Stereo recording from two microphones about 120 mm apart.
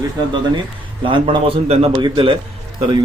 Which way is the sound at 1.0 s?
45° right (ahead or behind).